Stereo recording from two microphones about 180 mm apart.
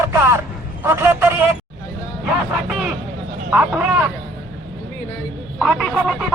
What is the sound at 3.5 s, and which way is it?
Vehicle, 5° right (ahead or behind).